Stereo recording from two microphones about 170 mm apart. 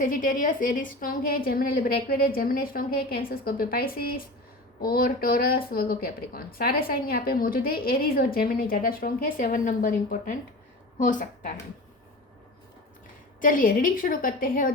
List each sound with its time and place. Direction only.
0.0 s a woman's voice: 55° left (ahead or behind)
13.4 s a woman's voice: 55° left (ahead or behind)